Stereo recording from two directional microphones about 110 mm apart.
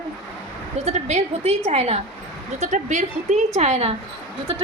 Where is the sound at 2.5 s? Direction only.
90° right.